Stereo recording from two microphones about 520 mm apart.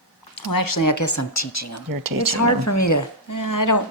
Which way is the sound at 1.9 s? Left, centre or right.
Right.